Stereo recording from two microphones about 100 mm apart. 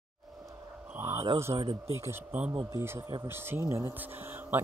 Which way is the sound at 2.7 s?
30° right (ahead or behind).